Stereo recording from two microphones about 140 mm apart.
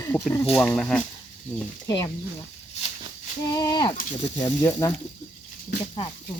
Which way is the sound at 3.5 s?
30° left (ahead or behind).